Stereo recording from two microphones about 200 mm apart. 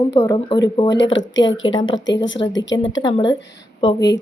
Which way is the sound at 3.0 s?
20° left (ahead or behind).